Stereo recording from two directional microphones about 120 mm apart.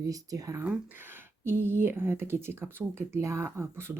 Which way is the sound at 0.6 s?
15° right (ahead or behind).